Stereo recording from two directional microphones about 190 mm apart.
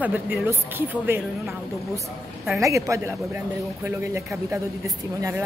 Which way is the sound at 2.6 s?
15° right (ahead or behind).